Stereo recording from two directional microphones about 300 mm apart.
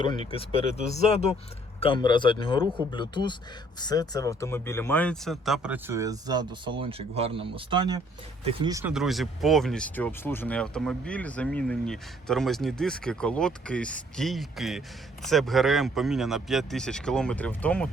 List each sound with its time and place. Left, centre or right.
0.0 s speech: centre